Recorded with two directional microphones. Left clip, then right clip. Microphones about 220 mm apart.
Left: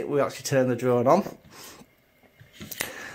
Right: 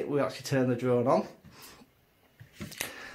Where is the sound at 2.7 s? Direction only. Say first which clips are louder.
Left 5 dB; 45° left (ahead or behind).